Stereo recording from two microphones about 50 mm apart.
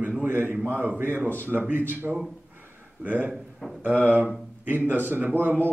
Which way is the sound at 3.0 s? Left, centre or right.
Right.